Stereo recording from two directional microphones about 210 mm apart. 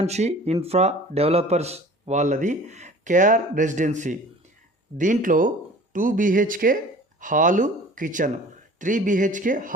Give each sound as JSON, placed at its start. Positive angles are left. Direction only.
{"t": 0.0, "sound": "speech", "side_deg": -30}